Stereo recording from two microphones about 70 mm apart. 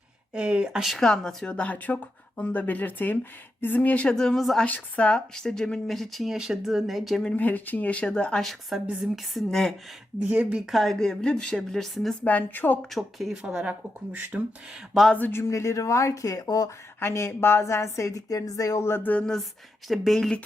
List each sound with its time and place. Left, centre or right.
0.3 s speech: centre
0.9 s a woman's voice: centre
4.6 s speech: centre
7.3 s speech: left
8.7 s speech: centre
10.2 s speech: right
10.7 s a woman's voice: centre
12.2 s speech: left
12.8 s speech: centre
13.3 s speech: centre
14.1 s speech: right
15.3 s speech: left
16.6 s a woman's voice: left
19.2 s a woman's voice: centre